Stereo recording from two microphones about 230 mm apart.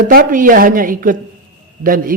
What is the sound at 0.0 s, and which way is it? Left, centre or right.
A man's voice, right.